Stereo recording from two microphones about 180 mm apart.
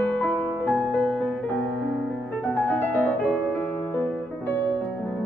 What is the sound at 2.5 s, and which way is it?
Music, 5° left (ahead or behind).